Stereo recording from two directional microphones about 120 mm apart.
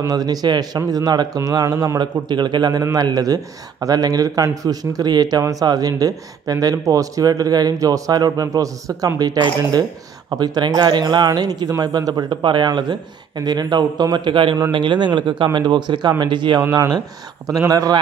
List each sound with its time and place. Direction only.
0.0 s a man's voice: 35° right (ahead or behind)